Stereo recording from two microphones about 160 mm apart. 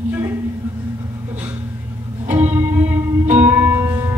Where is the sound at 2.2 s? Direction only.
10° right (ahead or behind).